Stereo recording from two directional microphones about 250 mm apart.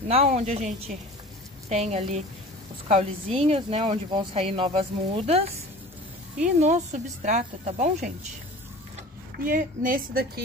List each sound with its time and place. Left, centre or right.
0.1 s speech: right
6.4 s speech: right
9.4 s a woman's voice: right